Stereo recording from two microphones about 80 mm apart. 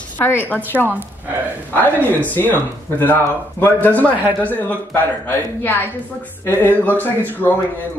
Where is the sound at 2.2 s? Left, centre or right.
Left.